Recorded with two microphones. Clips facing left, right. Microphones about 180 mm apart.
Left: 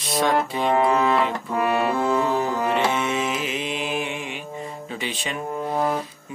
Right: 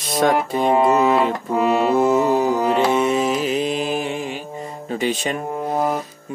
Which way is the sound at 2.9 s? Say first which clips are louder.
Right 6 dB; 35° right (ahead or behind).